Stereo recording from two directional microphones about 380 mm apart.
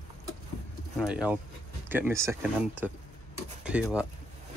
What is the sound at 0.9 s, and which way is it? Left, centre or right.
Speech, centre.